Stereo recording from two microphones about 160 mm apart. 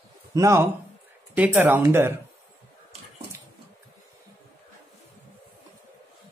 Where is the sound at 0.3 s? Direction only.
15° right (ahead or behind).